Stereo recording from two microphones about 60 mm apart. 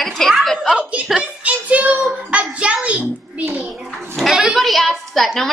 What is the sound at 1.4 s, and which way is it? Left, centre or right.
Child singing, right.